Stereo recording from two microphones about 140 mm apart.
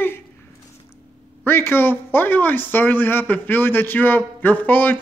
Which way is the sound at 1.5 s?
15° left (ahead or behind).